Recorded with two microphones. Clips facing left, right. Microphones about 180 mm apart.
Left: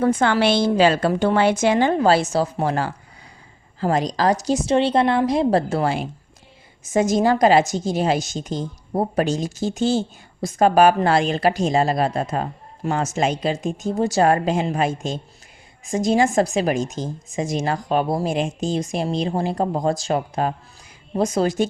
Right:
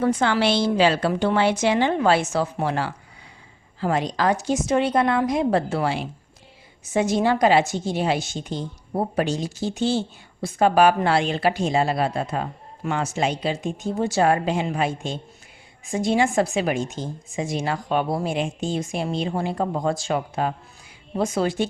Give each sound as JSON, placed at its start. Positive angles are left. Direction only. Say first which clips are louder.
{"t": 0.0, "sound": "a woman's voice", "louder": "left 2 dB", "side_deg": 50}